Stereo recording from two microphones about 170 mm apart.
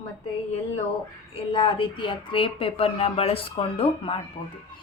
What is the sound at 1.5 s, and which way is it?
A woman's voice, 30° left (ahead or behind).